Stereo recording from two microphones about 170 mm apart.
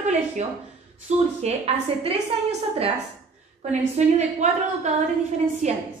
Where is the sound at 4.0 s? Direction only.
45° right (ahead or behind).